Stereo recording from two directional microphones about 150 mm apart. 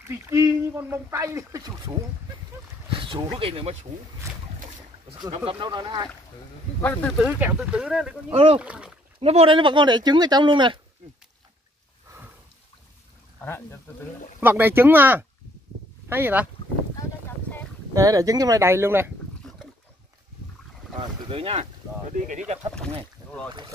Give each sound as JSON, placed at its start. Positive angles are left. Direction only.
{"t": 0.0, "sound": "speech", "side_deg": -20}
{"t": 2.9, "sound": "speech", "side_deg": -35}
{"t": 5.3, "sound": "speech", "side_deg": -35}
{"t": 6.8, "sound": "speech", "side_deg": 10}
{"t": 7.2, "sound": "speech", "side_deg": -10}
{"t": 8.3, "sound": "speech", "side_deg": -40}
{"t": 8.5, "sound": "speech", "side_deg": -5}
{"t": 9.2, "sound": "speech", "side_deg": -40}
{"t": 13.4, "sound": "speech", "side_deg": 15}
{"t": 14.4, "sound": "speech", "side_deg": -15}
{"t": 17.9, "sound": "speech", "side_deg": -20}
{"t": 21.3, "sound": "speech", "side_deg": -40}